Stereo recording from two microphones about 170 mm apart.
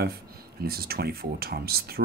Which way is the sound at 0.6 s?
65° right (ahead or behind).